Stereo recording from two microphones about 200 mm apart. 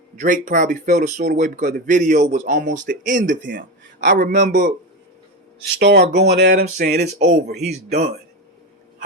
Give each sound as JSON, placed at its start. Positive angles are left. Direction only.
{"t": 0.2, "sound": "speech", "side_deg": -40}
{"t": 5.8, "sound": "speech", "side_deg": -55}